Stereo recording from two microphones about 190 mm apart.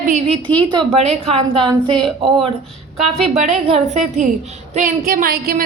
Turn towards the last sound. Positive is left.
turn(degrees=-50)  # may be behind; listen again after turning